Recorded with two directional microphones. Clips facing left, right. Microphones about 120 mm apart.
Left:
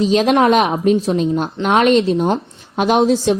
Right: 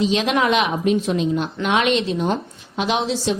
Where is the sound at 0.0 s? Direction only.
40° left (ahead or behind).